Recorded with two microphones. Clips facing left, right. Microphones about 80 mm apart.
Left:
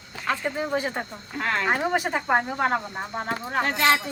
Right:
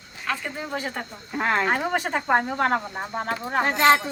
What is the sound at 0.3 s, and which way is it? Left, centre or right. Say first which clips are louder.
Speech: left 3 dB; centre.